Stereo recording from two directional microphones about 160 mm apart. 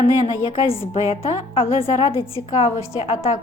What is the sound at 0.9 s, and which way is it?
A woman's voice, 35° left (ahead or behind).